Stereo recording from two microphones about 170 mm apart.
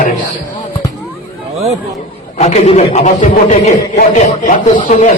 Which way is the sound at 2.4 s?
40° left (ahead or behind).